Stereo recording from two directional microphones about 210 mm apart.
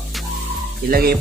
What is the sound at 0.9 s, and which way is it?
Speech, 45° right (ahead or behind).